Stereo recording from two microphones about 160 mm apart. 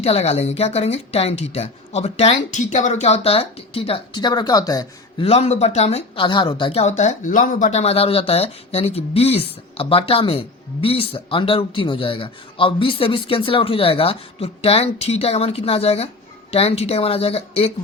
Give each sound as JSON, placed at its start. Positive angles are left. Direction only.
{"t": 0.0, "sound": "speech", "side_deg": 40}
{"t": 5.2, "sound": "speech", "side_deg": 40}
{"t": 6.2, "sound": "speech", "side_deg": 30}